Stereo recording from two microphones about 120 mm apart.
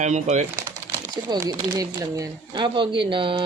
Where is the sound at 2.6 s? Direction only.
45° right (ahead or behind).